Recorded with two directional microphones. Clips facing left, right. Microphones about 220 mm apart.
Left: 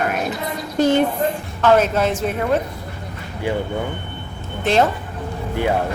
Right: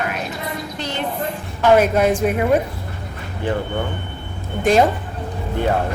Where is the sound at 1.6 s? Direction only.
10° right (ahead or behind).